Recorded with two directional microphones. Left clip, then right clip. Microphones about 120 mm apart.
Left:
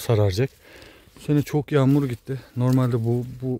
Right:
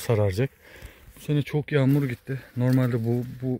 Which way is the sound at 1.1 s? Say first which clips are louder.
Left 5 dB; 55° left (ahead or behind).